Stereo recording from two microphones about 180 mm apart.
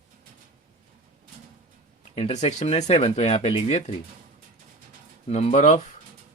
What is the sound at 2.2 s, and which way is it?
Speech, 35° left (ahead or behind).